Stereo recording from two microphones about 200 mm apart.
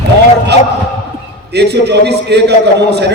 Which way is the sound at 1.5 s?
55° right (ahead or behind).